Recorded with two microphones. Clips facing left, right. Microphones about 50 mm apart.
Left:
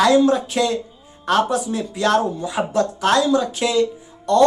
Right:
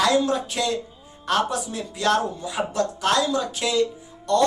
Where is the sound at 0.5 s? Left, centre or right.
Left.